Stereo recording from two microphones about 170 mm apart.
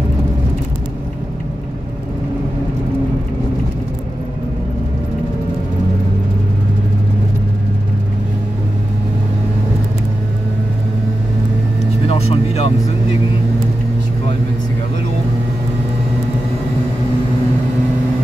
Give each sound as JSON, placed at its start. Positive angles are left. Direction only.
{"t": 12.1, "sound": "vehicle", "side_deg": 35}